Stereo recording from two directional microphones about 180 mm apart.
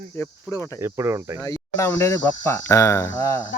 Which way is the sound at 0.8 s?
15° right (ahead or behind).